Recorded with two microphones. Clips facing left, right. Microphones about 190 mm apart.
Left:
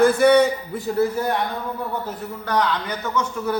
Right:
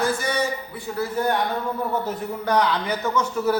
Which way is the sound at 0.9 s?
45° left (ahead or behind).